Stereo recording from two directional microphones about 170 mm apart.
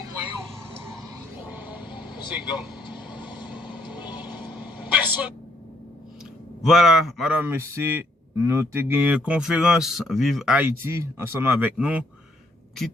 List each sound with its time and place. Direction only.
1.5 s vehicle: 10° right (ahead or behind)
2.8 s vehicle: 25° left (ahead or behind)
4.5 s vehicle: 10° right (ahead or behind)
6.6 s a man's voice: centre (ahead or behind)